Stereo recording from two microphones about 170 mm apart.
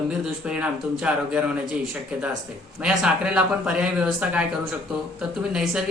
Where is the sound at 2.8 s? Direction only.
5° right (ahead or behind).